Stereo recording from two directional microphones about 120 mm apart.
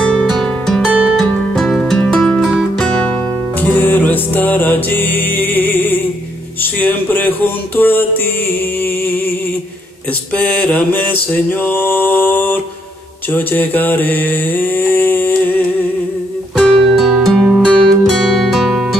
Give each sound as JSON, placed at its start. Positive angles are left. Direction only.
{"t": 0.0, "sound": "music", "side_deg": 5}
{"t": 3.5, "sound": "music", "side_deg": 15}
{"t": 10.3, "sound": "mantra", "side_deg": 10}
{"t": 13.3, "sound": "a sound", "side_deg": 15}
{"t": 16.5, "sound": "music", "side_deg": -5}